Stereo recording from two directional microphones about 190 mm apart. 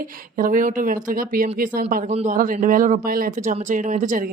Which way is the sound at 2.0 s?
40° right (ahead or behind).